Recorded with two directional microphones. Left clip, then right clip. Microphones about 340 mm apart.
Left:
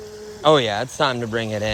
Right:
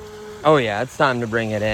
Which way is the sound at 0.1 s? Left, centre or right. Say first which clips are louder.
Right 1 dB; centre.